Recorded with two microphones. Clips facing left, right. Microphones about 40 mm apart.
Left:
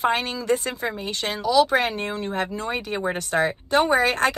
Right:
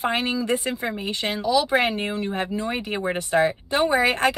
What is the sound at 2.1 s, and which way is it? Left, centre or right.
Speech, centre.